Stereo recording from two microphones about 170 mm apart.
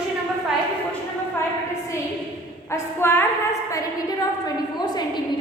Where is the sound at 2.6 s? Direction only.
15° left (ahead or behind).